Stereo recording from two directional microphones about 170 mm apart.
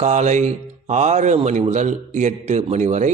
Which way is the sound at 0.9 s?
45° right (ahead or behind).